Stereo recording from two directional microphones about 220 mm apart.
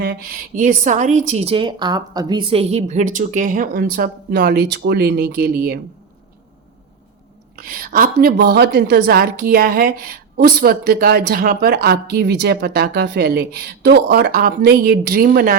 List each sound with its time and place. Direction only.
0.0 s a woman's voice: 40° right (ahead or behind)
7.5 s a woman's voice: 40° right (ahead or behind)